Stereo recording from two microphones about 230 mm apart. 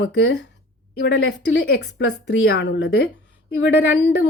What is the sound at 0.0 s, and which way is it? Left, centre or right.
A woman's voice, left.